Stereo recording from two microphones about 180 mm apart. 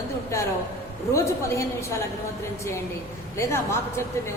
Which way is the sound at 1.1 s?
15° left (ahead or behind).